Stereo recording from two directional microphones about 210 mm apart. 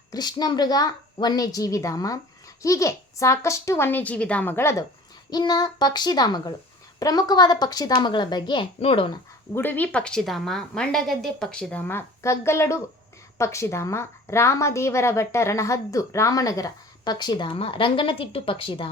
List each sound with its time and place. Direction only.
0.1 s a woman's voice: 20° left (ahead or behind)
9.6 s a woman's voice: 10° left (ahead or behind); by 18.9 s 25° left (ahead or behind)